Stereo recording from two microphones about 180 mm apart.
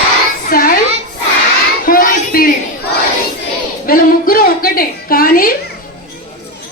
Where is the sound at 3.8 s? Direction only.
55° left (ahead or behind).